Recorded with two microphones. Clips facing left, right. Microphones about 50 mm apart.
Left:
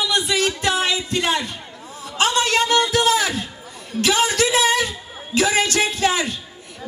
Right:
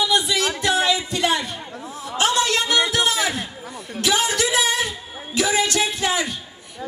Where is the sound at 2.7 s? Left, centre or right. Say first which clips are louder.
Left 2 dB; right.